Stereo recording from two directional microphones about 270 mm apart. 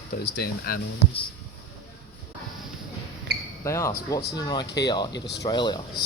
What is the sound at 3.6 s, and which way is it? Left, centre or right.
Speech, centre.